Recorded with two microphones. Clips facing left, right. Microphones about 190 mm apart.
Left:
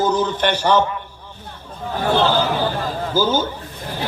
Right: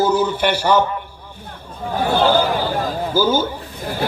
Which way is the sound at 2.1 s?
10° right (ahead or behind).